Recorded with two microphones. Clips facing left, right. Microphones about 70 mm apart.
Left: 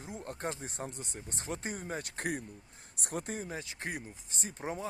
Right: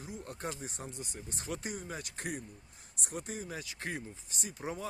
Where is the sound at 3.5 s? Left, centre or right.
Left.